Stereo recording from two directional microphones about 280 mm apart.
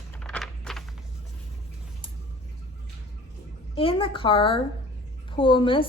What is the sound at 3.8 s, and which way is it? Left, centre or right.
A woman's voice, centre.